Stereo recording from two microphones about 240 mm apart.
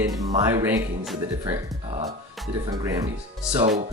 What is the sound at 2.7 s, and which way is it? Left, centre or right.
Speech, centre.